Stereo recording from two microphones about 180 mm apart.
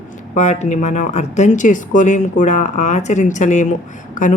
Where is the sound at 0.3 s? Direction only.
40° left (ahead or behind).